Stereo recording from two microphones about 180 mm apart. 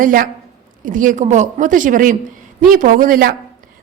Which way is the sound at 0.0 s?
50° right (ahead or behind).